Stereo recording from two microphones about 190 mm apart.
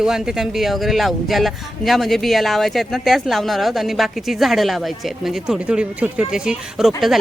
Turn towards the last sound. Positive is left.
turn(degrees=0)  # may be behind; listen again after turning